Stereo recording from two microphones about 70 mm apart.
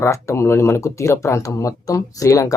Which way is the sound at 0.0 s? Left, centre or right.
Left.